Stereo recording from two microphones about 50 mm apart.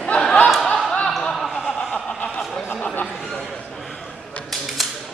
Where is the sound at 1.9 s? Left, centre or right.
Centre.